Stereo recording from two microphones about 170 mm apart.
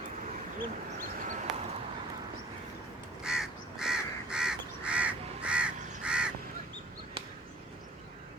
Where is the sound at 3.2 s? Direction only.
5° right (ahead or behind).